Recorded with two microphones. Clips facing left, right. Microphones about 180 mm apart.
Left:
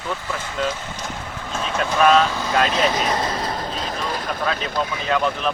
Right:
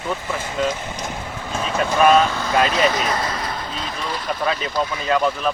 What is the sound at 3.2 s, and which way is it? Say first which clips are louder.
Vehicle: left 2 dB; 30° left (ahead or behind).